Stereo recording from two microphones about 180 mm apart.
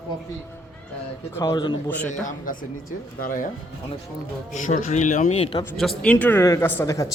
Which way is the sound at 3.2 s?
50° left (ahead or behind).